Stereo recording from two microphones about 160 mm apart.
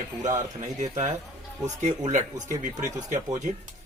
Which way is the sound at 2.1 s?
50° right (ahead or behind).